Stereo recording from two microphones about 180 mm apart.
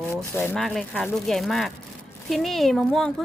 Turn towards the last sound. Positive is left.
turn(degrees=0)  # may be behind; listen again after turning